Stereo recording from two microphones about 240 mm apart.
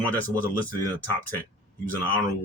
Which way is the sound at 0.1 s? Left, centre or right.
Centre.